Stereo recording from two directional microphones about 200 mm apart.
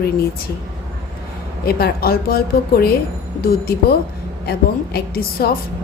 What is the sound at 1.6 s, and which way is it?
Speech, 50° left (ahead or behind).